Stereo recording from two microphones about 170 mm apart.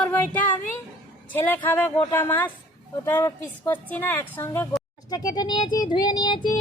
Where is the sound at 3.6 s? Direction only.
10° left (ahead or behind).